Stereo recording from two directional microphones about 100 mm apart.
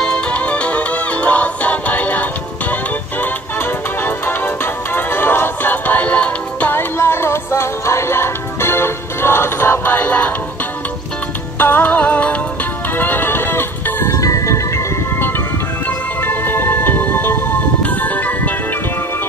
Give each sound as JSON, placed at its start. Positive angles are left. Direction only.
{"t": 0.0, "sound": "music", "side_deg": 10}
{"t": 11.5, "sound": "music", "side_deg": 20}